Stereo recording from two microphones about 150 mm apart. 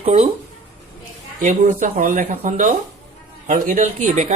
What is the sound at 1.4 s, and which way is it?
Speech, 60° right (ahead or behind).